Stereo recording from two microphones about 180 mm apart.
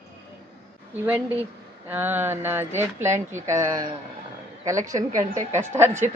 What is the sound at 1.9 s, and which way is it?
Speech, 10° right (ahead or behind).